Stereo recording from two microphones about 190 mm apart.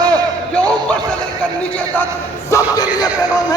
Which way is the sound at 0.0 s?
5° left (ahead or behind).